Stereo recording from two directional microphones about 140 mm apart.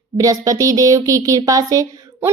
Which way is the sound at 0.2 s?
25° right (ahead or behind).